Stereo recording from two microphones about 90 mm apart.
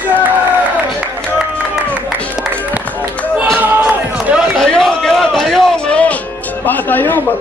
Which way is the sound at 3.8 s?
10° right (ahead or behind).